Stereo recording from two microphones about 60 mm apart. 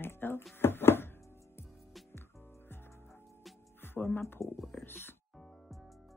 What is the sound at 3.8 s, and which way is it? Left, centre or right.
Music, left.